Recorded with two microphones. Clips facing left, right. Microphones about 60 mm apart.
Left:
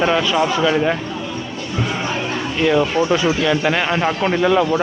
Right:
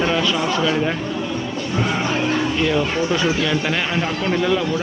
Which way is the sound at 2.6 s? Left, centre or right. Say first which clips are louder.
Left 3 dB; centre.